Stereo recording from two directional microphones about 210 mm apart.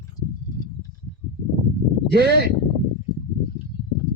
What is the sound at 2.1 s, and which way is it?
Speech, 50° right (ahead or behind).